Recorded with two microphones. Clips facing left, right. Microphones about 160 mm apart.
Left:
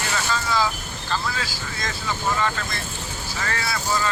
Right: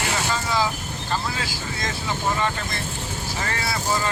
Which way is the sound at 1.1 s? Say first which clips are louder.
Even; 25° right (ahead or behind).